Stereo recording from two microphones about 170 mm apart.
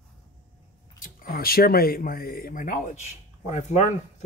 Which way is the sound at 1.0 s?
55° left (ahead or behind).